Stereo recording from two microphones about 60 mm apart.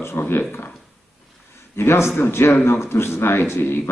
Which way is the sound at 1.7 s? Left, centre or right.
Left.